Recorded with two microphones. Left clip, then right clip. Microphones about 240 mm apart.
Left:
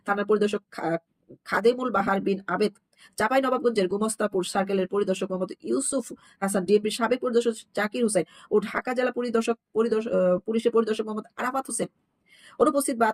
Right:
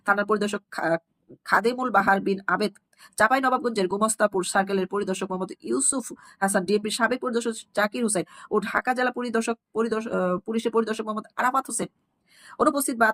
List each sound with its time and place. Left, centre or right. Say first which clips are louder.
0.0 s speech: right 1 dB; centre